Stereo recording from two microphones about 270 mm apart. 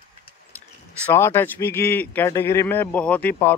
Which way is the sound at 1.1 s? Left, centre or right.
Centre.